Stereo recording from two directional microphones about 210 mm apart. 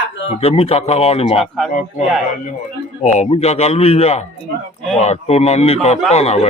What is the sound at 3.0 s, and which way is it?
A man's voice, 30° left (ahead or behind).